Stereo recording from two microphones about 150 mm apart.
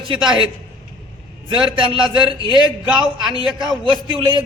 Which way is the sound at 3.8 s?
30° right (ahead or behind).